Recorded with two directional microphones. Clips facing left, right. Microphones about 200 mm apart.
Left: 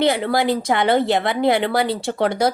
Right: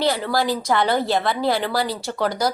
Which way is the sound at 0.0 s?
20° left (ahead or behind).